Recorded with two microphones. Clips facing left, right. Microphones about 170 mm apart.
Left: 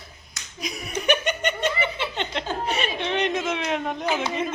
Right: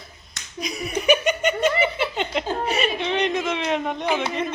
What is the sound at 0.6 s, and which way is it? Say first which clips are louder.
Chuckle: right 3 dB; centre (ahead or behind).